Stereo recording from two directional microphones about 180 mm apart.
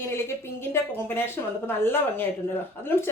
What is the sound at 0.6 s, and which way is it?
Speech, 10° left (ahead or behind).